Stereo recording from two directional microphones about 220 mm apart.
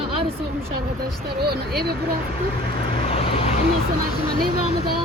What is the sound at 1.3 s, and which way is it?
Speech, 45° right (ahead or behind).